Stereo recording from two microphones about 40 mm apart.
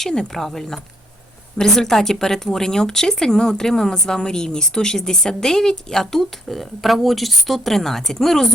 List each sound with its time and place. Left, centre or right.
0.0 s a woman's voice: centre